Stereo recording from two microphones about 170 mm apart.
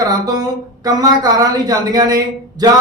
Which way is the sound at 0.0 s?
20° right (ahead or behind).